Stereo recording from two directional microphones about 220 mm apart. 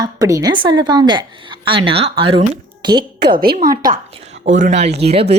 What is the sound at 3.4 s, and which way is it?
Speech, 40° right (ahead or behind).